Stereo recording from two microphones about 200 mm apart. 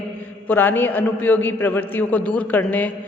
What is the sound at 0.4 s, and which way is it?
A man's voice, 10° left (ahead or behind).